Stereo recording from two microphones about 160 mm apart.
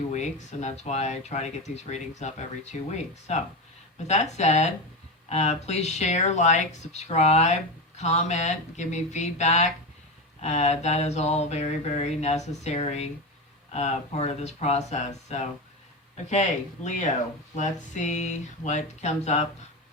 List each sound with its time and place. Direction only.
0.1 s mantra: 45° left (ahead or behind)